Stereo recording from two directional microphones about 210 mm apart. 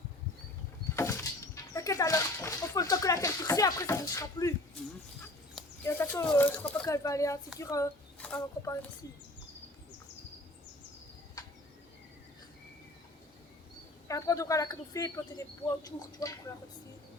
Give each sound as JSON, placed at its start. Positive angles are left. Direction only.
{"t": 0.9, "sound": "a sound", "side_deg": 15}
{"t": 1.7, "sound": "speech", "side_deg": 15}
{"t": 5.8, "sound": "speech", "side_deg": 10}
{"t": 11.4, "sound": "turkey", "side_deg": 15}
{"t": 14.1, "sound": "speech", "side_deg": 15}